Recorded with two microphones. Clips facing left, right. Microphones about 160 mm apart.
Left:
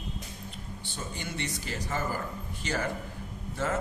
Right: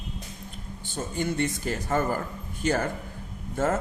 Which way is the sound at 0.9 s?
45° right (ahead or behind).